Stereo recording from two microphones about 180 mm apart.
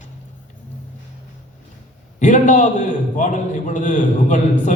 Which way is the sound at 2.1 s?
45° left (ahead or behind).